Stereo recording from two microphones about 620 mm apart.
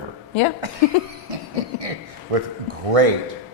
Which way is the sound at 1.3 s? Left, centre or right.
Right.